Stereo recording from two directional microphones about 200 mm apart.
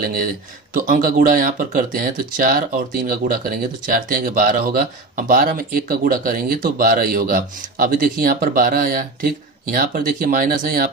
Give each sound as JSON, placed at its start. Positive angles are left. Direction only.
{"t": 0.0, "sound": "speech", "side_deg": -45}